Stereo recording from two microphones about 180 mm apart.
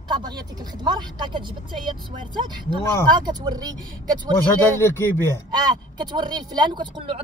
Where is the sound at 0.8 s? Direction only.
25° right (ahead or behind).